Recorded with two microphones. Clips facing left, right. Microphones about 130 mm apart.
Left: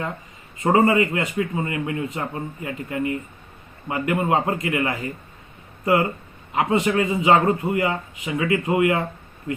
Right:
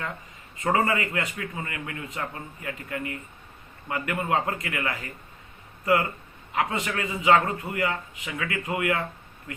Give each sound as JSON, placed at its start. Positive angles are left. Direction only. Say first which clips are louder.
{"t": 0.6, "sound": "a man's voice", "louder": "left 7 dB", "side_deg": 25}